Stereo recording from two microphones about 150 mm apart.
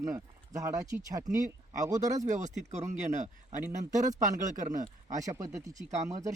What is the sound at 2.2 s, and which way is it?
Speech, 55° right (ahead or behind).